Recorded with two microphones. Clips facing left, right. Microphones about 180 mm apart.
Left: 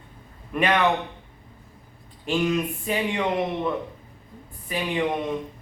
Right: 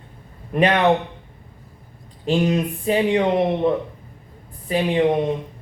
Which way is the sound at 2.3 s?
35° right (ahead or behind).